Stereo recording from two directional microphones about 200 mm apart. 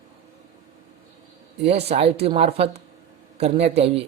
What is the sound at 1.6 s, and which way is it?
Speech, 30° right (ahead or behind).